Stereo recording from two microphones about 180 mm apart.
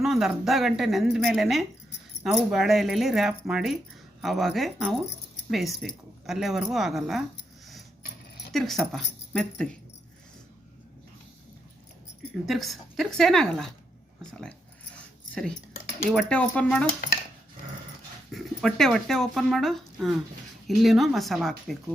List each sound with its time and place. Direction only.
0.0 s speech: centre (ahead or behind)
8.5 s speech: centre (ahead or behind)
12.5 s speech: centre (ahead or behind)
16.0 s speech: 5° left (ahead or behind)
18.3 s speech: centre (ahead or behind)